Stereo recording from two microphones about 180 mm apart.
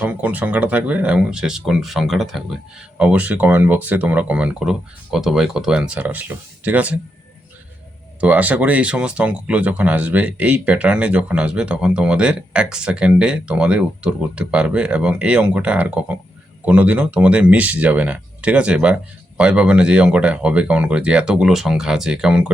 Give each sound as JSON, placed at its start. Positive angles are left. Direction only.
{"t": 0.0, "sound": "speech", "side_deg": -10}
{"t": 8.2, "sound": "speech", "side_deg": -10}